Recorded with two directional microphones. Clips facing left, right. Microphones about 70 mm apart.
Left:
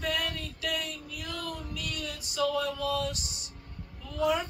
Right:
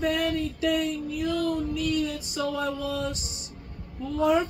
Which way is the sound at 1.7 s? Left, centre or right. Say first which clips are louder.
Right 11 dB; right.